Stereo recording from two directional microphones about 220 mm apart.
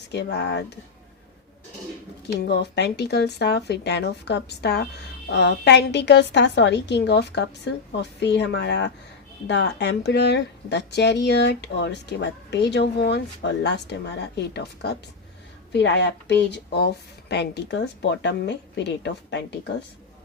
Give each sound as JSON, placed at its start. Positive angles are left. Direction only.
{"t": 0.1, "sound": "speech", "side_deg": 50}
{"t": 2.2, "sound": "speech", "side_deg": 50}